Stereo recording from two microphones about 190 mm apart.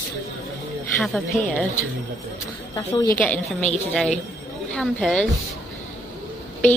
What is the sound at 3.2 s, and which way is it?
A woman's voice, 10° left (ahead or behind).